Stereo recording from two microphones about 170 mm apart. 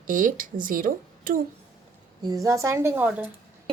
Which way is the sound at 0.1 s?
50° right (ahead or behind).